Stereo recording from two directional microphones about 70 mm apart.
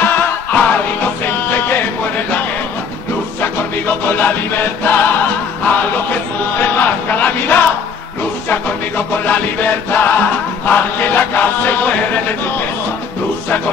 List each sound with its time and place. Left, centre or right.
0.0 s music: left
3.3 s music: left
6.6 s a sound: left
8.5 s music: left